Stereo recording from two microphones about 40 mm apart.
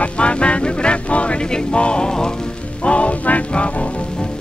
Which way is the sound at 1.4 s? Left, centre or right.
Left.